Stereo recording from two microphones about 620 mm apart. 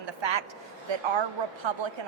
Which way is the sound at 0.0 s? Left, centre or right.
Right.